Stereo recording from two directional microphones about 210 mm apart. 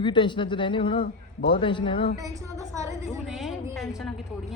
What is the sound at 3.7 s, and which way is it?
Speech, centre (ahead or behind).